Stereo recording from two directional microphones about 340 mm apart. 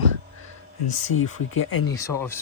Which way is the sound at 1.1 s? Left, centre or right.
Left.